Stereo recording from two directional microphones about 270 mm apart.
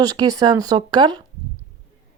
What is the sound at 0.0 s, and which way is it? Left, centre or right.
Speech, centre.